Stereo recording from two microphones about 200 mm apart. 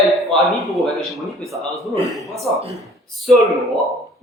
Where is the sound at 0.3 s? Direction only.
Centre (ahead or behind).